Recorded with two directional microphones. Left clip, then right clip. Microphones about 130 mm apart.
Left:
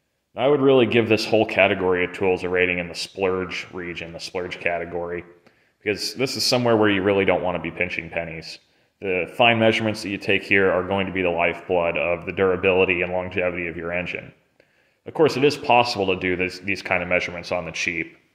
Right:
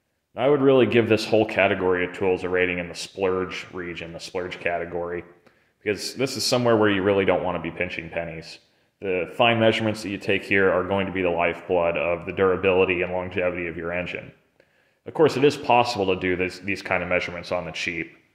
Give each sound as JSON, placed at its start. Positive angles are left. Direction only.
{"t": 0.4, "sound": "speech", "side_deg": 10}